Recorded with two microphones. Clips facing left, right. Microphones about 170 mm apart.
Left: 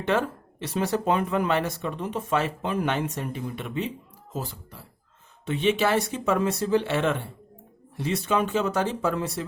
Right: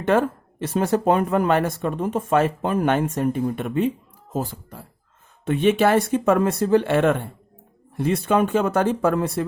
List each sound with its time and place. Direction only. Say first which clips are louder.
0.0 s speech: right 5 dB; 50° right (ahead or behind)